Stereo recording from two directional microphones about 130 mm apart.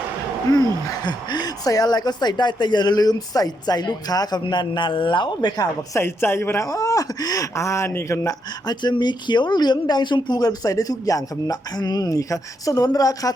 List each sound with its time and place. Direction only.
0.9 s speech: 35° left (ahead or behind)
6.0 s speech: 20° left (ahead or behind)